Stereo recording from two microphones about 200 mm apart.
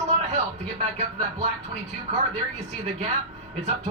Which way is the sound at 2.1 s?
30° right (ahead or behind).